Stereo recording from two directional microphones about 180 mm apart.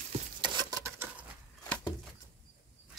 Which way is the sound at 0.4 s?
25° right (ahead or behind).